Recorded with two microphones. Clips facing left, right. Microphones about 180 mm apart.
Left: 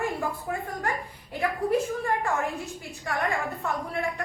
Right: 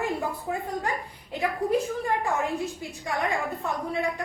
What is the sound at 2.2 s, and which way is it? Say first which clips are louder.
A woman's voice: right 2 dB; 15° right (ahead or behind).